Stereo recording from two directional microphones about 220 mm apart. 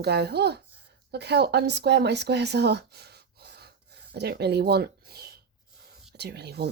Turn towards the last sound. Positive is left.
turn(degrees=-50)  # may be behind; listen again after turning